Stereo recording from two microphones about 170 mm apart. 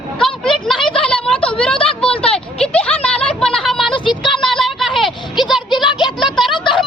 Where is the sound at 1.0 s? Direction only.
5° left (ahead or behind).